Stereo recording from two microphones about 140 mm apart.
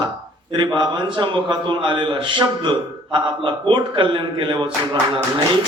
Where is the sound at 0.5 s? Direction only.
35° right (ahead or behind).